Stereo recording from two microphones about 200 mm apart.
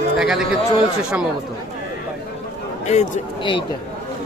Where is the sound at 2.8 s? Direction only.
35° left (ahead or behind).